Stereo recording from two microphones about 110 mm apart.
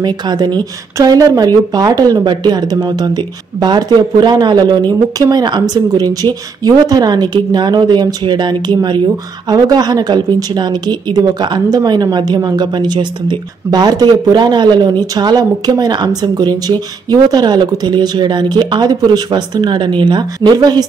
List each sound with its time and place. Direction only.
0.0 s speech: 40° right (ahead or behind)